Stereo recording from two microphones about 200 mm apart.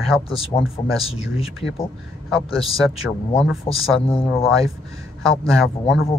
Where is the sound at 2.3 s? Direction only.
Centre (ahead or behind).